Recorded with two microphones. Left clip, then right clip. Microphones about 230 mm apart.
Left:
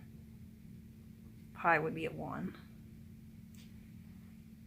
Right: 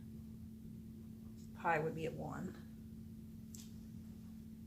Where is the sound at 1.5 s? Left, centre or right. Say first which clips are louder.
Left 6 dB; left.